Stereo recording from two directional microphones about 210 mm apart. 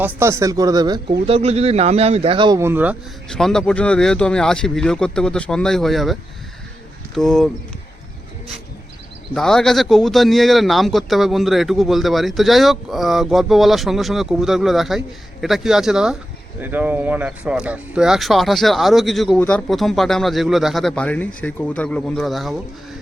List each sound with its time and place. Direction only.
0.2 s speech: 15° right (ahead or behind)
1.3 s speech: 30° right (ahead or behind); by 2.9 s 10° right (ahead or behind)
3.2 s speech: 5° left (ahead or behind)
9.3 s speech: centre (ahead or behind)